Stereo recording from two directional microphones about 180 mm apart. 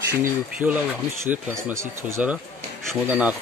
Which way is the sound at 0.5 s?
10° right (ahead or behind).